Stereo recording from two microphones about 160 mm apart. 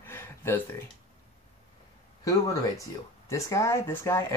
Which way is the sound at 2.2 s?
20° left (ahead or behind).